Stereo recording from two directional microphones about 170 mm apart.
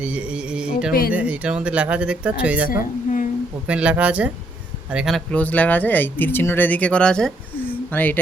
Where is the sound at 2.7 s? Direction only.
55° left (ahead or behind).